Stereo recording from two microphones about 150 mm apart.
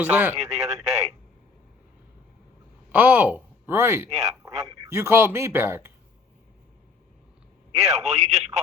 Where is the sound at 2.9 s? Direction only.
10° right (ahead or behind).